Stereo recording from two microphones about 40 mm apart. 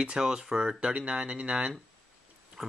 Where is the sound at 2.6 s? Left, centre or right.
Centre.